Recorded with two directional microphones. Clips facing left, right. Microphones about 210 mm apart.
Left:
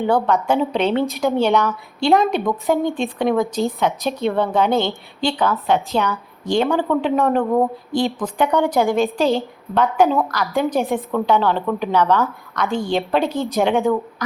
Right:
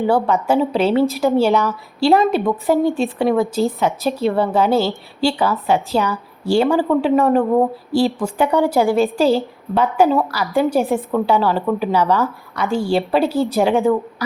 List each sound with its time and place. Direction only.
0.0 s a woman's voice: 5° right (ahead or behind)
13.2 s speech: 30° right (ahead or behind)
13.6 s a woman's voice: centre (ahead or behind)